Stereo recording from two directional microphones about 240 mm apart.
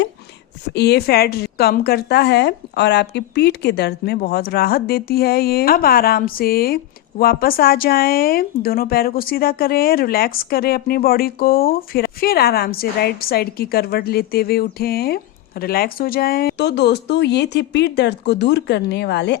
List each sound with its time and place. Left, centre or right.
0.7 s speech: left